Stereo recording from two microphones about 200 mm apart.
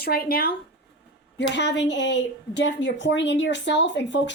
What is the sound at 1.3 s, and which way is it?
A woman's voice, 60° left (ahead or behind).